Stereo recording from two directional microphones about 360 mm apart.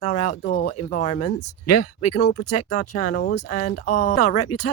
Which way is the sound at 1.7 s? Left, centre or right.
Left.